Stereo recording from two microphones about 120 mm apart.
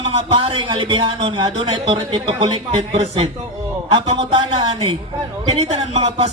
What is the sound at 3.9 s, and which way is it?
Speech, 45° right (ahead or behind).